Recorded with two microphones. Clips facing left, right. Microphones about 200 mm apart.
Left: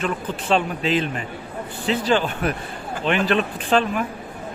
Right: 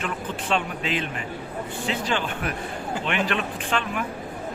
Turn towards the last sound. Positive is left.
turn(degrees=35)  # may be behind; listen again after turning